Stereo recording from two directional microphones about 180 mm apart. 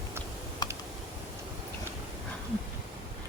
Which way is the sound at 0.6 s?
20° left (ahead or behind).